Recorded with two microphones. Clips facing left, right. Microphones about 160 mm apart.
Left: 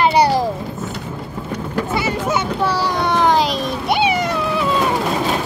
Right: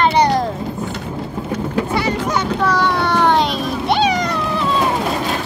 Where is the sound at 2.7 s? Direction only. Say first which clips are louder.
Right 3 dB; 30° left (ahead or behind).